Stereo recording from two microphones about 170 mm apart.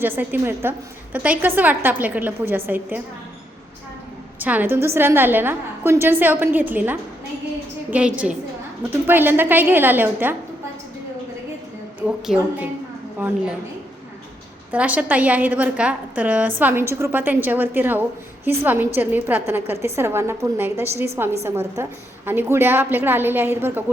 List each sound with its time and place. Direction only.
0.0 s a woman's voice: 10° right (ahead or behind)
4.4 s a woman's voice: 10° right (ahead or behind)
11.9 s a woman's voice: 5° right (ahead or behind)
14.7 s a woman's voice: 10° right (ahead or behind)